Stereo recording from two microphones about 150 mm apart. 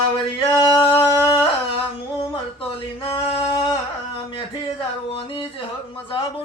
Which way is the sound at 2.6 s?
35° left (ahead or behind).